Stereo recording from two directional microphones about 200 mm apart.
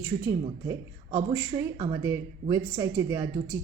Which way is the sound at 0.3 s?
15° right (ahead or behind).